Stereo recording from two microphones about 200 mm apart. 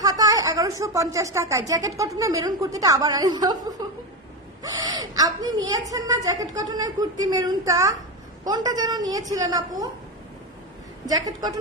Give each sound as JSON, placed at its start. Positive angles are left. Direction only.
{"t": 0.0, "sound": "speech", "side_deg": -20}
{"t": 3.8, "sound": "chuckle", "side_deg": -20}
{"t": 4.6, "sound": "a woman's voice", "side_deg": -20}
{"t": 11.0, "sound": "a woman's voice", "side_deg": -20}